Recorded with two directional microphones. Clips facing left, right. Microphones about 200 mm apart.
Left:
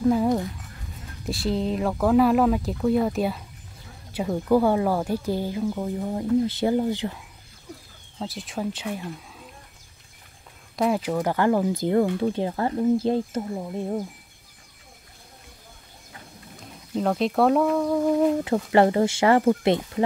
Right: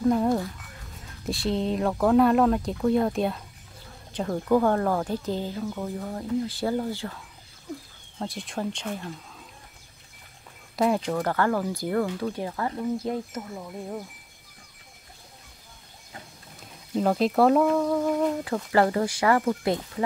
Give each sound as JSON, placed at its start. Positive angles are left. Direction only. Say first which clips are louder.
{"t": 0.0, "sound": "speech", "louder": "left 2 dB", "side_deg": 5}
{"t": 8.2, "sound": "speech", "louder": "left 1 dB", "side_deg": 0}
{"t": 10.8, "sound": "speech", "louder": "left 1 dB", "side_deg": 5}
{"t": 16.9, "sound": "speech", "louder": "even", "side_deg": 0}
{"t": 18.1, "sound": "speech", "louder": "left 5 dB", "side_deg": 25}